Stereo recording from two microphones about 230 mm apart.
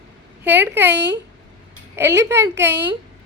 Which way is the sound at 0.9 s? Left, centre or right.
Right.